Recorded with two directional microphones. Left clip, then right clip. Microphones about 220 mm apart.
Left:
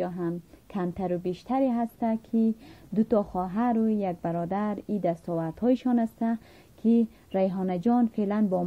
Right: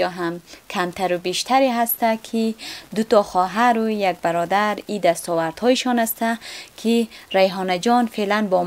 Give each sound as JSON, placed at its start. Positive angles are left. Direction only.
{"t": 0.0, "sound": "speech", "side_deg": -10}
{"t": 5.1, "sound": "speech", "side_deg": -20}
{"t": 5.5, "sound": "speech", "side_deg": -10}